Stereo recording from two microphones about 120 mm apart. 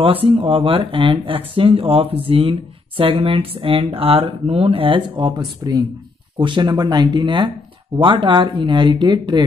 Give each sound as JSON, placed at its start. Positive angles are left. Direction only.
{"t": 0.0, "sound": "speech", "side_deg": -50}